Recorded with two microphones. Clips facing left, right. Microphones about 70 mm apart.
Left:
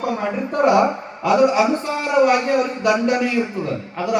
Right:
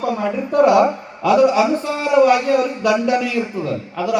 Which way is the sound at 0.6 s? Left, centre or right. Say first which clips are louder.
Right 2 dB; centre.